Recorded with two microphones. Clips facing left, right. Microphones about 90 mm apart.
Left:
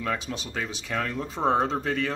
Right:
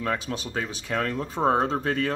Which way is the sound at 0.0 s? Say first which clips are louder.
Right 2 dB; 40° right (ahead or behind).